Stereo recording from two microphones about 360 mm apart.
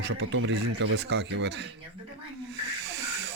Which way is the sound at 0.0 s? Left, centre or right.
Right.